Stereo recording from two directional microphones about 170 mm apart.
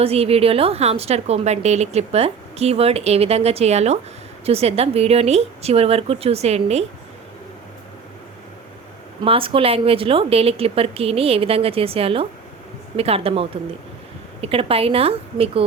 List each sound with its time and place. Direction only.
0.0 s a woman's voice: 35° right (ahead or behind)
9.2 s a woman's voice: 30° right (ahead or behind)